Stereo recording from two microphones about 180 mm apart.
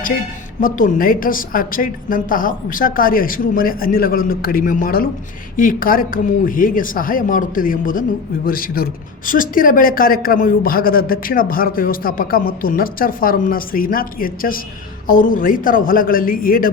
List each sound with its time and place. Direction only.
0.6 s speech: 50° left (ahead or behind)